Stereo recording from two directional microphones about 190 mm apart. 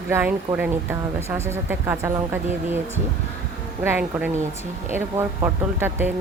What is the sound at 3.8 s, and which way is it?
Speech, 10° right (ahead or behind).